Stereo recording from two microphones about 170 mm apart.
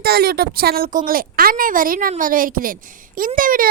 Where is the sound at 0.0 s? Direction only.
65° right (ahead or behind).